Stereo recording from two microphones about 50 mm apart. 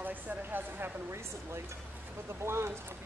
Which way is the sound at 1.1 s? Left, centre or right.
Right.